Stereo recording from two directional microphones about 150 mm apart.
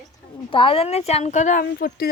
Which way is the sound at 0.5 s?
35° left (ahead or behind).